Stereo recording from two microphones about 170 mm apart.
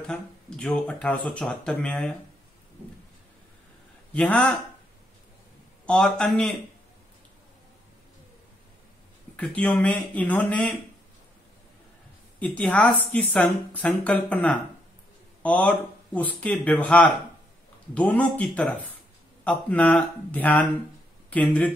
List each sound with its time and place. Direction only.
0.0 s speech: 5° left (ahead or behind)
4.1 s speech: 5° left (ahead or behind)
5.9 s a man's voice: 5° left (ahead or behind)
9.4 s speech: 5° left (ahead or behind)
12.4 s speech: 10° left (ahead or behind)